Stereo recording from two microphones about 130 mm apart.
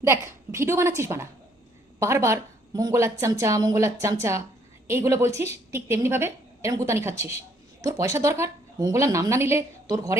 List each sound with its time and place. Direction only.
0.0 s a woman's voice: 20° right (ahead or behind)